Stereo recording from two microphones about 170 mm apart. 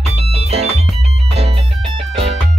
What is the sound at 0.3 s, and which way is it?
Music, 40° right (ahead or behind).